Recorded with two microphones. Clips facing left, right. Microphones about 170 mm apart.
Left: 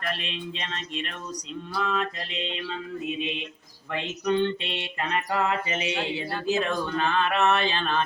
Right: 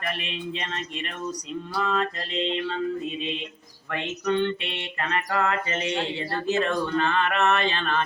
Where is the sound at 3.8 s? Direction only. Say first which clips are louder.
Even; 15° left (ahead or behind).